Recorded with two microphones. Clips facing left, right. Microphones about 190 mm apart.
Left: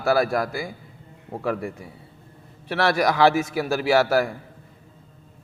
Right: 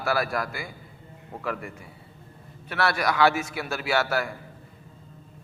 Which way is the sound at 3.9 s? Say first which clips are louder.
Left 6 dB; 40° left (ahead or behind).